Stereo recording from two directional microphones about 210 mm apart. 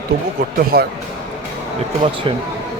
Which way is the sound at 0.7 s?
50° right (ahead or behind).